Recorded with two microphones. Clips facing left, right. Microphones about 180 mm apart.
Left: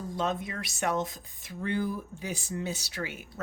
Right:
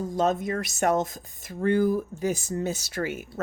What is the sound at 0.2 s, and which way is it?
Speech, 45° right (ahead or behind).